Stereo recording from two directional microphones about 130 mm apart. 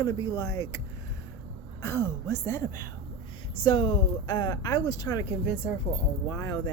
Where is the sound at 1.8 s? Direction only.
20° left (ahead or behind).